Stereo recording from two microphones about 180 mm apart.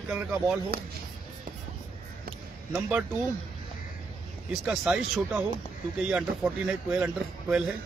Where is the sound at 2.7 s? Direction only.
10° right (ahead or behind).